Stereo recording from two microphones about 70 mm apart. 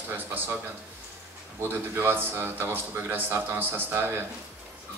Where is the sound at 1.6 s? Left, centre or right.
Right.